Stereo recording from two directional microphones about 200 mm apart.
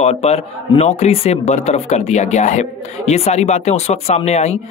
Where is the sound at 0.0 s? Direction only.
30° left (ahead or behind).